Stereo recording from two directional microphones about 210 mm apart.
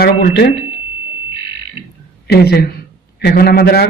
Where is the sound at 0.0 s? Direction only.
50° left (ahead or behind).